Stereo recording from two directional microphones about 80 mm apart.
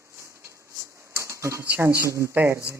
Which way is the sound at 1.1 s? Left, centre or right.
Right.